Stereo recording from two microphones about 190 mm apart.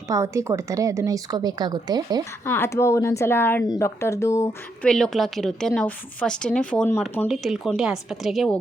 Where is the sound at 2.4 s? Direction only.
15° left (ahead or behind).